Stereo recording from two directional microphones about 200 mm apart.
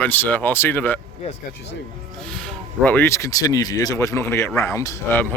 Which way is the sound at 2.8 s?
10° left (ahead or behind).